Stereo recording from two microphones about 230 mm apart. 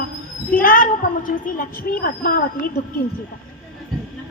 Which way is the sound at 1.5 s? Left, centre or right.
Left.